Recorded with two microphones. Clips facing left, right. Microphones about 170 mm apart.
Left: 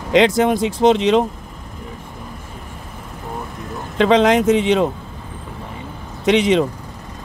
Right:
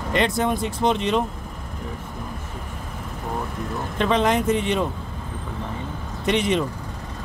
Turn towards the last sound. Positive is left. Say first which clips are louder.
# left 7 dB
turn(degrees=90)